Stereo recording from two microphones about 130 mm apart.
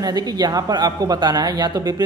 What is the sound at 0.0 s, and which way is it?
Speech, 30° right (ahead or behind).